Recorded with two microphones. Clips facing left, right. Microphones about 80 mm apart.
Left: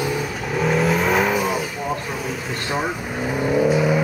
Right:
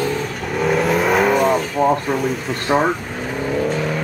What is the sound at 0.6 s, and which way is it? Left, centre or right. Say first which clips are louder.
Vehicle: right 2 dB; centre.